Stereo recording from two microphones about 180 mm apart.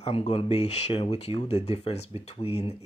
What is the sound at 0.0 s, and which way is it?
Speech, 35° left (ahead or behind).